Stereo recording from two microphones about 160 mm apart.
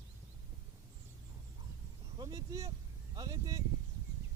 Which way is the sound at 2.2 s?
20° right (ahead or behind).